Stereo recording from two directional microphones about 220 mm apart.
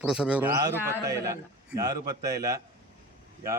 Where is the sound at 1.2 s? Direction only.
15° right (ahead or behind).